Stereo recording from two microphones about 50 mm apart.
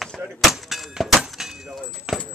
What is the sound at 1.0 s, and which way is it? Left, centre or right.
Keys jangling, centre.